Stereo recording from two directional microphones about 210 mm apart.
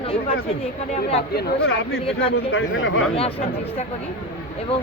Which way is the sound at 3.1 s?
30° left (ahead or behind).